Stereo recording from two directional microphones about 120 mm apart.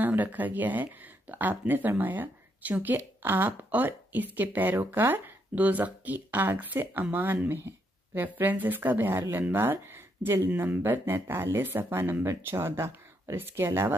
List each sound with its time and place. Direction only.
0.0 s speech: 15° right (ahead or behind)